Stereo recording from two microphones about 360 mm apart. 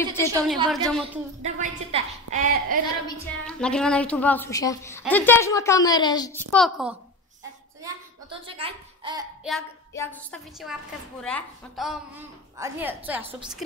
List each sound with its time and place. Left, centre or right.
0.3 s a woman's voice: centre
1.4 s a woman's voice: centre
3.1 s a woman's voice: centre
7.8 s a woman's voice: centre
9.4 s a woman's voice: centre